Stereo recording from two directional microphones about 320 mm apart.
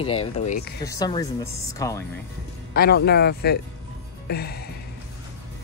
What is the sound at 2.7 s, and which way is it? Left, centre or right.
Speech, left.